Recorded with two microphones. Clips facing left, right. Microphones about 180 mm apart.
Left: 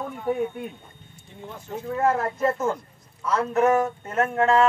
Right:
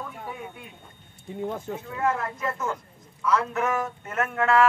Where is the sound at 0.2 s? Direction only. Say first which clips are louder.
Left 12 dB; 55° left (ahead or behind).